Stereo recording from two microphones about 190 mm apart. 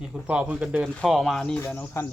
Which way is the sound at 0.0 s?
5° right (ahead or behind).